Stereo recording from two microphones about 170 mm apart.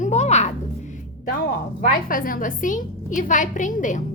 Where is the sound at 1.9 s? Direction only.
55° left (ahead or behind).